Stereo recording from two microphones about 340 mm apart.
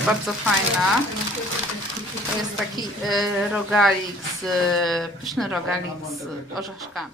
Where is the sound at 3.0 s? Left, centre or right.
Centre.